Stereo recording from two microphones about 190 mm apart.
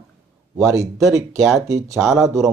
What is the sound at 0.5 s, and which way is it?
Speech, 15° right (ahead or behind).